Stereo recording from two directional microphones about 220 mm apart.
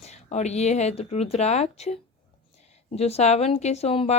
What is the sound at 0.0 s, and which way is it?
A woman's voice, 30° left (ahead or behind).